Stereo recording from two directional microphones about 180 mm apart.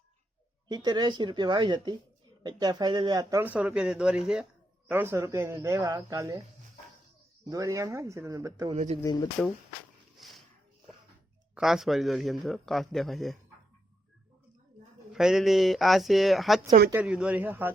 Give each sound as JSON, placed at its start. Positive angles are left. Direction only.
{"t": 0.7, "sound": "speech", "side_deg": -25}
{"t": 7.5, "sound": "speech", "side_deg": -15}
{"t": 8.7, "sound": "speech", "side_deg": -40}
{"t": 9.0, "sound": "speech", "side_deg": 25}
{"t": 10.2, "sound": "speech", "side_deg": 0}
{"t": 11.5, "sound": "a man's voice", "side_deg": 0}
{"t": 15.1, "sound": "a man's voice", "side_deg": -5}